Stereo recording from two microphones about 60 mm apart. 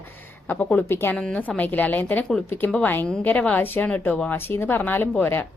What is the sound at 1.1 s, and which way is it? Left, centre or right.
Speech, centre.